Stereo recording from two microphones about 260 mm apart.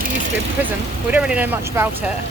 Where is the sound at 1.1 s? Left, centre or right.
Centre.